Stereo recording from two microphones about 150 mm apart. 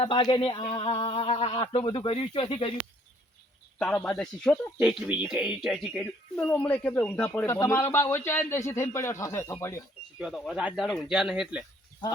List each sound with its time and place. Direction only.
0.0 s speech: 35° left (ahead or behind)
3.8 s speech: 10° left (ahead or behind)
5.0 s speech: 10° right (ahead or behind); by 9.8 s 15° left (ahead or behind)
10.2 s speech: centre (ahead or behind)